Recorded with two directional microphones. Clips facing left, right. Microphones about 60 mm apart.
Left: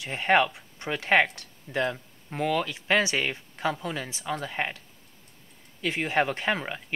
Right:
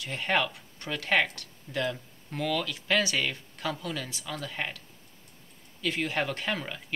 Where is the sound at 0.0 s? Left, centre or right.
Left.